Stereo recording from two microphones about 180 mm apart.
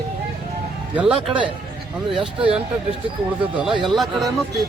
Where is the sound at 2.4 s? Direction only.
30° right (ahead or behind).